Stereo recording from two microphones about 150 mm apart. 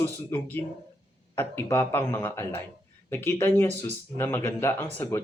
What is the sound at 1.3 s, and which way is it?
Speech, 15° left (ahead or behind).